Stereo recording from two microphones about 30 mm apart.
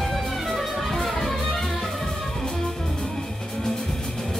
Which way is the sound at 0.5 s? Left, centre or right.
Centre.